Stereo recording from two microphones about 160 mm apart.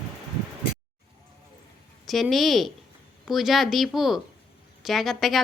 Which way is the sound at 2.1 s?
Centre (ahead or behind).